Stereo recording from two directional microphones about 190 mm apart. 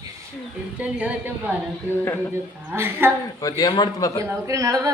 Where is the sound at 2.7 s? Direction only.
10° right (ahead or behind).